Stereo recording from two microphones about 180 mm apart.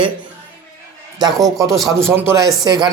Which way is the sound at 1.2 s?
20° right (ahead or behind).